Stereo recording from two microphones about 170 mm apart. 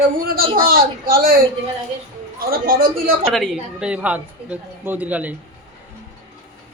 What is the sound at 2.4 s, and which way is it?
Speech, 60° right (ahead or behind).